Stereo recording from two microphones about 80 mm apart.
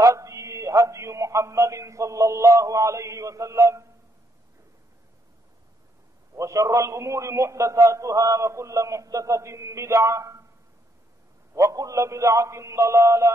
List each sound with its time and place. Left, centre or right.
0.0 s mantra: right
6.3 s a man's voice: right
11.5 s a man's voice: right